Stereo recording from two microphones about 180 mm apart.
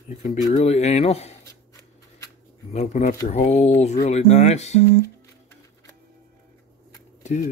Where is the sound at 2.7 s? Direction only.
40° left (ahead or behind).